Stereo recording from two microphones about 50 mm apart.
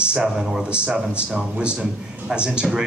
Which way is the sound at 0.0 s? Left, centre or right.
Centre.